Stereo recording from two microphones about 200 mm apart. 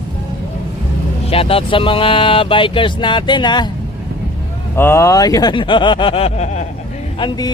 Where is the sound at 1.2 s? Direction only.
30° left (ahead or behind).